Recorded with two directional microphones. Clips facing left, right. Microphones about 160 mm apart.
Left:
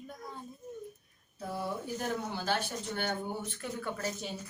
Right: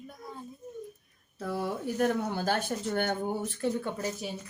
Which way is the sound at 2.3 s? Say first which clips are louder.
Right 4 dB; 50° right (ahead or behind).